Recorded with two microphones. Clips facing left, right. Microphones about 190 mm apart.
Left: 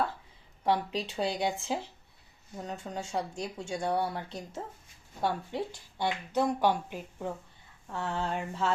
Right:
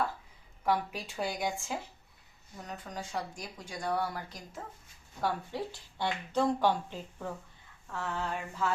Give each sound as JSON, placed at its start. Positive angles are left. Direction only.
{"t": 0.6, "sound": "speech", "side_deg": 25}
{"t": 2.6, "sound": "speech", "side_deg": 25}
{"t": 7.9, "sound": "speech", "side_deg": 25}